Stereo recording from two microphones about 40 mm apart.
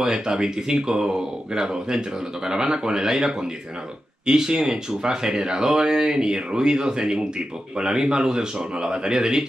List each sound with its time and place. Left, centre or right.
0.0 s speech: right